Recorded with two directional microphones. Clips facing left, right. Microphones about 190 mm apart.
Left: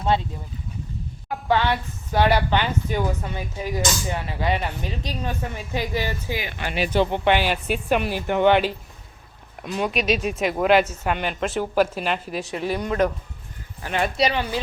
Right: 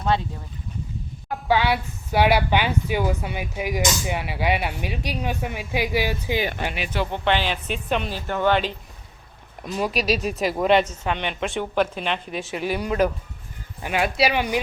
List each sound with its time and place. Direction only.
1.3 s speech: 5° right (ahead or behind)
6.7 s speech: 30° left (ahead or behind)
7.1 s a woman's voice: 10° left (ahead or behind)
9.6 s speech: centre (ahead or behind)